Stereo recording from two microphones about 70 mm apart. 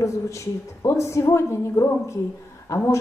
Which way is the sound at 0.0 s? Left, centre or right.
Left.